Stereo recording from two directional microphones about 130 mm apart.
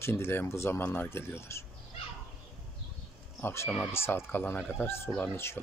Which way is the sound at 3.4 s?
20° left (ahead or behind).